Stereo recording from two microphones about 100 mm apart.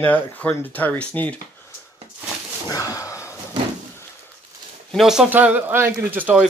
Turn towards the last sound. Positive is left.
turn(degrees=-20)  # may be behind; listen again after turning